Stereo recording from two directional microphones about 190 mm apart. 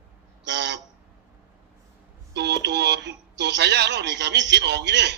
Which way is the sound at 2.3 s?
60° right (ahead or behind).